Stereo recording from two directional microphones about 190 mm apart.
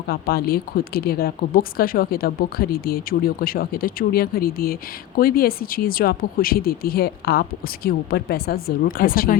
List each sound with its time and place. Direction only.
0.1 s speech: 55° left (ahead or behind)